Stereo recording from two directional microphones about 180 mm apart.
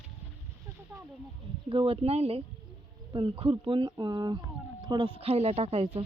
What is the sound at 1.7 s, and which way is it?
Speech, 30° right (ahead or behind).